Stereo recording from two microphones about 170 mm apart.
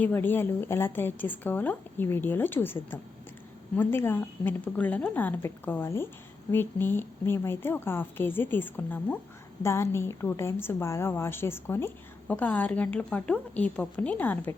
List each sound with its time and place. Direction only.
0.0 s a woman's voice: 10° left (ahead or behind)